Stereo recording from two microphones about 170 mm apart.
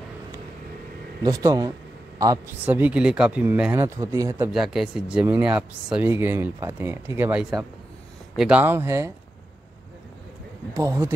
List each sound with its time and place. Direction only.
1.2 s speech: 20° right (ahead or behind)
4.5 s speech: centre (ahead or behind)
10.8 s speech: 20° right (ahead or behind)